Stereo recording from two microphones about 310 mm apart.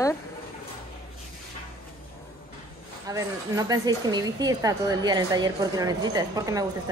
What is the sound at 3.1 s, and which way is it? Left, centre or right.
Speech, centre.